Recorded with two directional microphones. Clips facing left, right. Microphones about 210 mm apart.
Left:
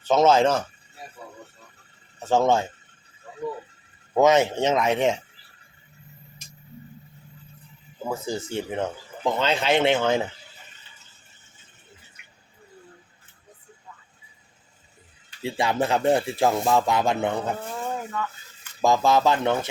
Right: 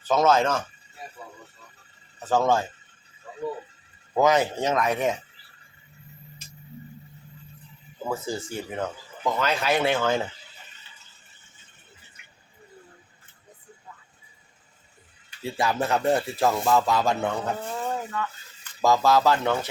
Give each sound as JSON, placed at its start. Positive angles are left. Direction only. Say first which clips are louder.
{"t": 0.0, "sound": "speech", "louder": "left 3 dB", "side_deg": 25}
{"t": 2.1, "sound": "speech", "louder": "left 2 dB", "side_deg": 25}
{"t": 4.1, "sound": "speech", "louder": "left 3 dB", "side_deg": 25}
{"t": 8.0, "sound": "speech", "louder": "left 1 dB", "side_deg": 15}
{"t": 15.4, "sound": "speech", "louder": "left 2 dB", "side_deg": 20}
{"t": 17.7, "sound": "a sound", "louder": "right 1 dB", "side_deg": 0}
{"t": 18.8, "sound": "speech", "louder": "even", "side_deg": 20}